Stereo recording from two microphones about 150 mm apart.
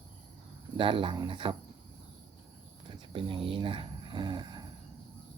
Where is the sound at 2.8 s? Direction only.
35° right (ahead or behind).